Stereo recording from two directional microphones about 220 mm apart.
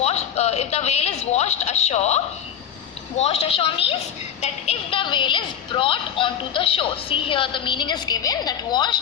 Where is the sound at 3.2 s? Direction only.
25° left (ahead or behind).